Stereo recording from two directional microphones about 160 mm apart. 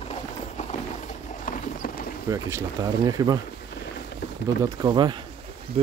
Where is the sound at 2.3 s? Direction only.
20° right (ahead or behind).